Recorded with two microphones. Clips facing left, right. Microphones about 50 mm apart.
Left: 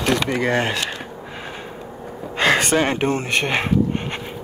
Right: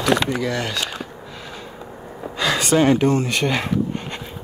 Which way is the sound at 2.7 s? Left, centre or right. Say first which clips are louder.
Right 3 dB; left.